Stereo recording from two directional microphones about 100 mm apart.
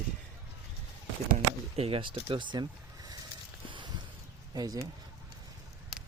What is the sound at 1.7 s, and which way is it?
Speech, 75° right (ahead or behind).